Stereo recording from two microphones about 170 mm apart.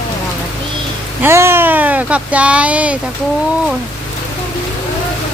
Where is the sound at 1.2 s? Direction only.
15° right (ahead or behind).